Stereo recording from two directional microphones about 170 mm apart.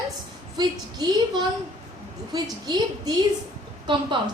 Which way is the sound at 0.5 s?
25° right (ahead or behind).